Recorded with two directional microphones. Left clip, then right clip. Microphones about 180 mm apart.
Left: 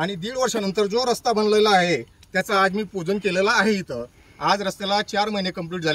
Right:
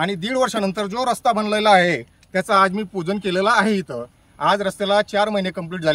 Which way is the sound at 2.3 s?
20° right (ahead or behind).